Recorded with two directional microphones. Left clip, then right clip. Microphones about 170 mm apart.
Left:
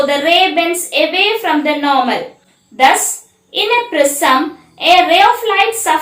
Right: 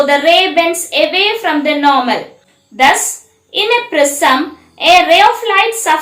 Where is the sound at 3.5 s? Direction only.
25° right (ahead or behind).